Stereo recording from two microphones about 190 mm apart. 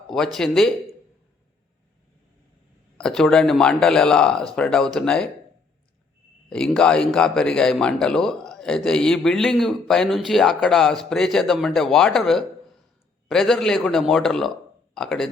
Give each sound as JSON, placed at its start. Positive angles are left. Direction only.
{"t": 0.1, "sound": "a man's voice", "side_deg": 0}
{"t": 3.0, "sound": "a man's voice", "side_deg": 5}
{"t": 6.5, "sound": "a man's voice", "side_deg": 5}